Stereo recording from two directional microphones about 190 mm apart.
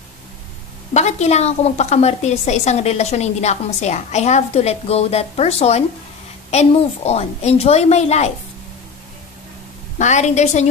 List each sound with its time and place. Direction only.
0.9 s a woman's voice: 35° left (ahead or behind)
9.9 s a woman's voice: 40° left (ahead or behind)